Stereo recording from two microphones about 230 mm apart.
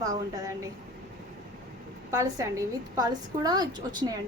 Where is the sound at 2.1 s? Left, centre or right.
Centre.